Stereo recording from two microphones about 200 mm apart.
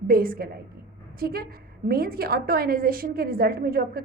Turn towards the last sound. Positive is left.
turn(degrees=-50)  # may be behind; listen again after turning